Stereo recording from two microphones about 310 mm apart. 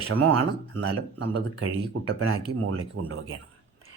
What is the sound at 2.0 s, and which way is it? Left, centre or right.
Speech, right.